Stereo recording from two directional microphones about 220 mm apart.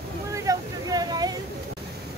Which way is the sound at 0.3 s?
15° right (ahead or behind).